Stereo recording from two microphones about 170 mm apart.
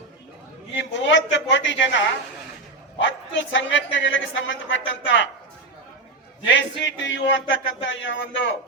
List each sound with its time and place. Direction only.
0.7 s a man's voice: 90° left
6.4 s a man's voice: 90° left